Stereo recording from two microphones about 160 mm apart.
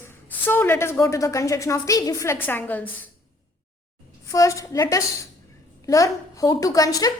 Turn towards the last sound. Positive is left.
turn(degrees=20)  # may be behind; listen again after turning